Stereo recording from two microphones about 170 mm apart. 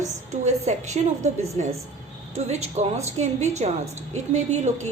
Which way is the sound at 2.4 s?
40° right (ahead or behind).